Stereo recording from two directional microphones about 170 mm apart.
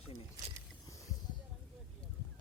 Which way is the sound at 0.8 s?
20° left (ahead or behind).